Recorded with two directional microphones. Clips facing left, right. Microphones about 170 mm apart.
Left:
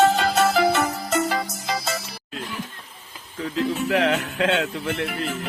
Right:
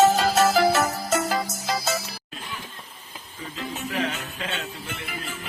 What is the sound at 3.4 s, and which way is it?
Speech, 80° left.